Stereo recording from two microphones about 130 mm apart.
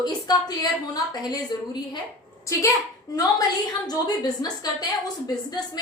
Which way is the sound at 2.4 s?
25° left (ahead or behind).